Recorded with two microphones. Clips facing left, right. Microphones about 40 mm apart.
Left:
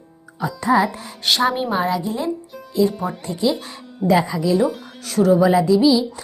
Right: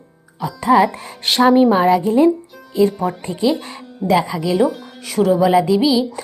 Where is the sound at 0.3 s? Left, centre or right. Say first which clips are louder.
Right 3 dB; centre.